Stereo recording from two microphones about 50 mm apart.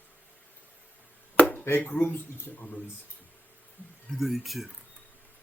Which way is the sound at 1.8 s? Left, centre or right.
Left.